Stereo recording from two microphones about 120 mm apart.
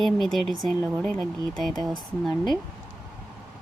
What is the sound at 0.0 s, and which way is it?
Speech, centre (ahead or behind).